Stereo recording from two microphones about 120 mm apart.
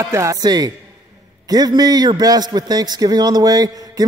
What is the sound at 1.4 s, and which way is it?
A man's voice, 35° right (ahead or behind).